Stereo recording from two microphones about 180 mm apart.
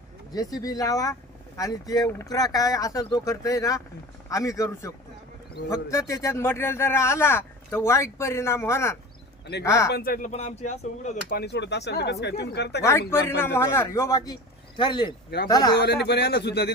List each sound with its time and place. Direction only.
0.3 s a man's voice: 20° left (ahead or behind)
9.9 s speech: 55° left (ahead or behind)
11.3 s speech: 70° left (ahead or behind)
12.8 s a man's voice: 15° left (ahead or behind)
16.0 s speech: 65° left (ahead or behind)